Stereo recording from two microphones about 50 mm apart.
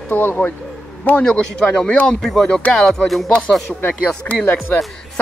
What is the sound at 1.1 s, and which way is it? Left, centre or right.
Speech, left.